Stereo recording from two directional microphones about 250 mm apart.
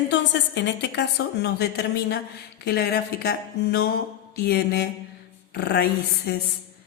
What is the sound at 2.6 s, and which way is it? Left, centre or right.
Mantra, left.